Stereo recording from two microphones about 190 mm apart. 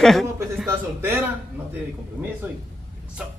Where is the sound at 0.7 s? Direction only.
10° right (ahead or behind).